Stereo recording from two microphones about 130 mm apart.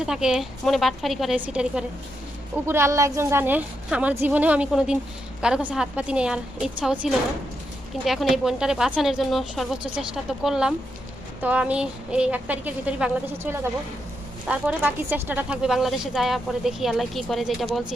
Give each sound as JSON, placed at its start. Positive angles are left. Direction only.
{"t": 0.0, "sound": "a woman's voice", "side_deg": -5}
{"t": 2.6, "sound": "a woman's voice", "side_deg": -20}